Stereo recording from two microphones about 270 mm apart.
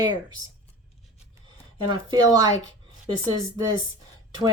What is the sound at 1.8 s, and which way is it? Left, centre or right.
Speech, centre.